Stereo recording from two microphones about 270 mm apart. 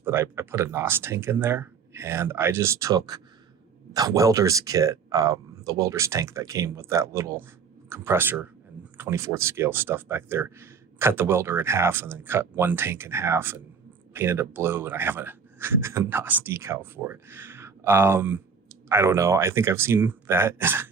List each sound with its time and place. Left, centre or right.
0.0 s speech: centre